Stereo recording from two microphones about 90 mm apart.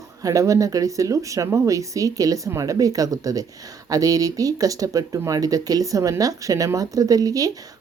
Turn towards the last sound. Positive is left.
turn(degrees=-40)  # may be behind; listen again after turning